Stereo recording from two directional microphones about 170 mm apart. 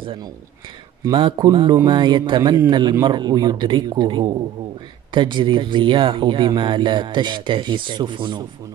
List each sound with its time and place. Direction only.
0.0 s speech: 30° right (ahead or behind)